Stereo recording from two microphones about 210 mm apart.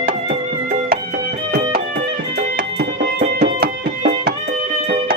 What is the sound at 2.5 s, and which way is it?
Music, 50° right (ahead or behind).